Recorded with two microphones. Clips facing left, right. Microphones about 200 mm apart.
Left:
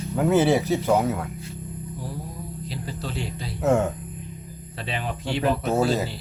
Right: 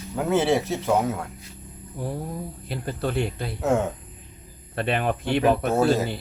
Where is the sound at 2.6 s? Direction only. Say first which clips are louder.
Right 6 dB; 55° right (ahead or behind).